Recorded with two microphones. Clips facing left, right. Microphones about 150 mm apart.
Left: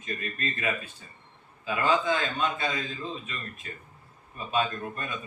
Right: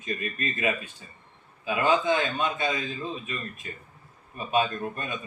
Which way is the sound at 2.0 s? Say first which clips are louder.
Right 2 dB; 20° right (ahead or behind).